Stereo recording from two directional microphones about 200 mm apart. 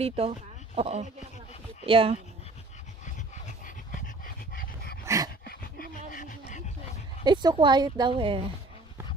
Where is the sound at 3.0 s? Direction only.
35° left (ahead or behind).